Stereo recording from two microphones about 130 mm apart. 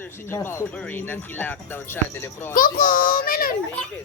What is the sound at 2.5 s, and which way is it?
Speech, 90° left.